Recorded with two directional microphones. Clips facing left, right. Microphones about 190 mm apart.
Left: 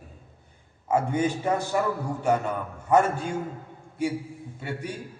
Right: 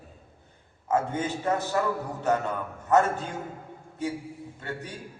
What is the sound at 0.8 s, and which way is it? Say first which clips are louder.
A man's voice: left 3 dB; 15° left (ahead or behind).